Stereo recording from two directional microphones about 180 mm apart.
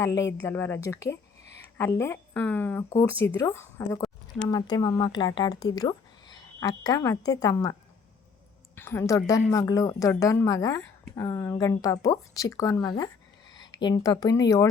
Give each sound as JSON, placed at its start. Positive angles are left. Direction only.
{"t": 0.2, "sound": "a woman's voice", "side_deg": 15}